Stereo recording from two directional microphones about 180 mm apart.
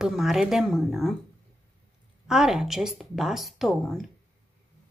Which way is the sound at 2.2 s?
Centre (ahead or behind).